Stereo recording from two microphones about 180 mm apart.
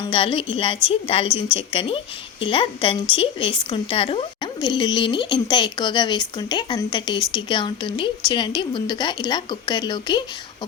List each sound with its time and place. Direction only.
0.0 s a woman's voice: 30° left (ahead or behind)